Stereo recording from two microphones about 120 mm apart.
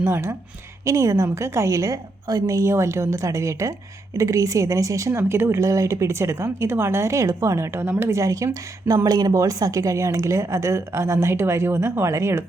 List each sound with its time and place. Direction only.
0.0 s a woman's voice: 20° right (ahead or behind)